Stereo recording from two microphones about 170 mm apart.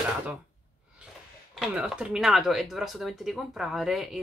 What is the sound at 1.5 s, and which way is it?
Speech, 5° right (ahead or behind).